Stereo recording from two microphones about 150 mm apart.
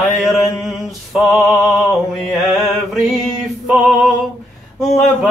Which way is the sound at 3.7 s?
Centre (ahead or behind).